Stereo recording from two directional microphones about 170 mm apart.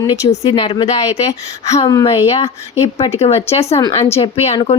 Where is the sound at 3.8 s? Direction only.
20° left (ahead or behind).